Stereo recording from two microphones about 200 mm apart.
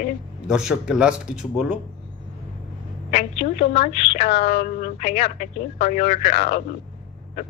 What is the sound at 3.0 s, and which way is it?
A woman's voice, 30° left (ahead or behind).